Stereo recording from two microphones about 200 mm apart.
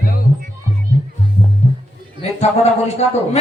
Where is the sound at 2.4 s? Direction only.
35° left (ahead or behind).